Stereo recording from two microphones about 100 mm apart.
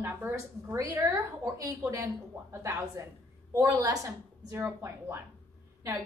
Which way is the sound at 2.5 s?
25° right (ahead or behind).